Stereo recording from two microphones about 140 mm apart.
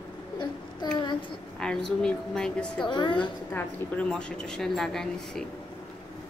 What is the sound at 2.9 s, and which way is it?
Speech, 35° left (ahead or behind).